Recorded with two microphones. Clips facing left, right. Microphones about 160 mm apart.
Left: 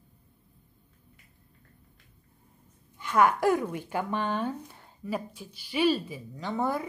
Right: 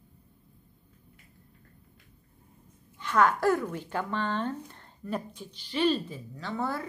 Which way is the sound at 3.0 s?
10° left (ahead or behind).